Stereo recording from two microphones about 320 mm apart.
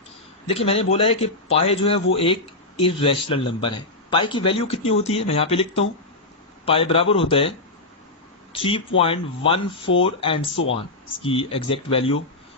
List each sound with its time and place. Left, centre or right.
0.4 s speech: centre
8.5 s speech: centre